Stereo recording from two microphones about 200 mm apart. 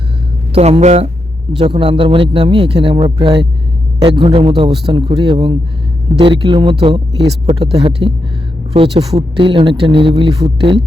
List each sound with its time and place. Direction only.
0.5 s speech: 30° right (ahead or behind)